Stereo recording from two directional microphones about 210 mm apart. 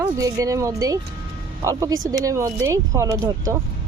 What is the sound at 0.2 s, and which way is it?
Speech, 15° right (ahead or behind).